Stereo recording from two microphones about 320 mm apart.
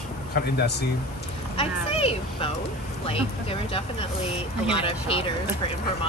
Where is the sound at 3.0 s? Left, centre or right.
Centre.